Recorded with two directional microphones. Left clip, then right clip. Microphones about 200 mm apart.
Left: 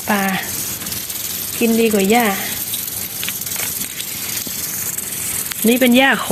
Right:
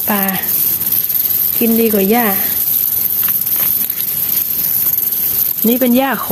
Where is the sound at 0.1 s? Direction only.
15° right (ahead or behind).